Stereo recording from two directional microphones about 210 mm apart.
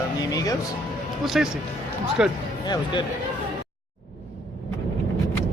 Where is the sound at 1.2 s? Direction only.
Centre (ahead or behind).